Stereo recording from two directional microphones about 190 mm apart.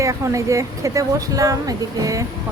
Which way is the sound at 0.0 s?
15° right (ahead or behind).